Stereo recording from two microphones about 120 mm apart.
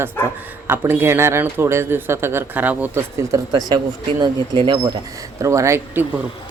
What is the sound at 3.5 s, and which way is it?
Speech, 35° right (ahead or behind).